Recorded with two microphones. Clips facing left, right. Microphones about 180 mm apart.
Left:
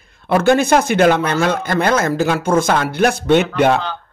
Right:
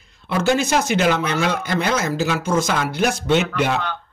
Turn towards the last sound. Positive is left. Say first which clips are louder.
# left 6 dB
turn(degrees=55)  # may be behind; listen again after turning